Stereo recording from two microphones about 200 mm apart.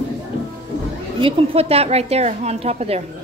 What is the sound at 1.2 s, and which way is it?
A woman's voice, 30° right (ahead or behind).